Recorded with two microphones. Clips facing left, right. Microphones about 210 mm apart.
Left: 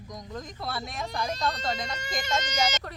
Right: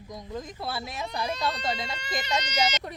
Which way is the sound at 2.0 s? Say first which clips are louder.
Even; 50° left (ahead or behind).